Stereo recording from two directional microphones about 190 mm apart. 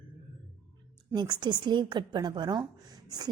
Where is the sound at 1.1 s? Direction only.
25° right (ahead or behind).